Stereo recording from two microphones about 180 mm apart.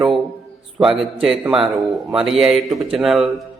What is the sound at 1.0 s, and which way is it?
Speech, 5° right (ahead or behind).